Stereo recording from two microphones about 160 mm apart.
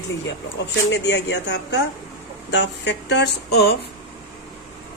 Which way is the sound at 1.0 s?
90° left.